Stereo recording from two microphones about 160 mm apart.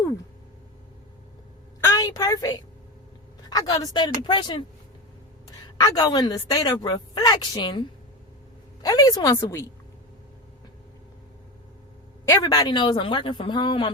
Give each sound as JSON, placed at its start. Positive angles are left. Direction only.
{"t": 1.8, "sound": "a child's voice", "side_deg": 20}
{"t": 5.7, "sound": "a woman's voice", "side_deg": 25}
{"t": 12.3, "sound": "a woman's voice", "side_deg": 25}